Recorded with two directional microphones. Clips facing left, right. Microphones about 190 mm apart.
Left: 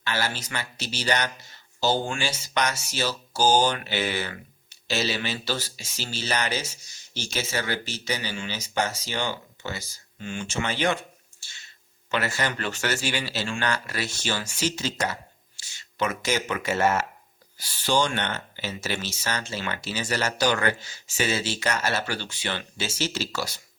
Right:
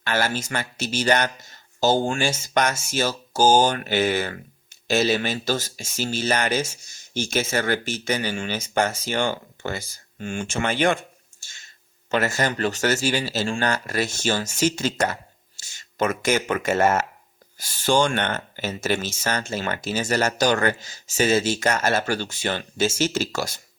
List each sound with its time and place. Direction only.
0.0 s speech: 50° right (ahead or behind)